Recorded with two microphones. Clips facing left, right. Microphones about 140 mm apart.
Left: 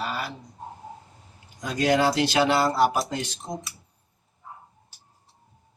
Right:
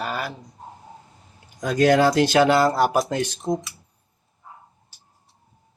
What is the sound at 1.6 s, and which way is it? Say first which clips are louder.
Speech: right 5 dB; 50° right (ahead or behind).